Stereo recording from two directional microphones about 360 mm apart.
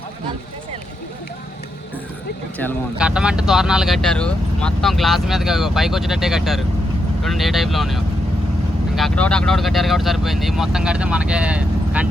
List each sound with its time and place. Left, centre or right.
2.6 s speech: centre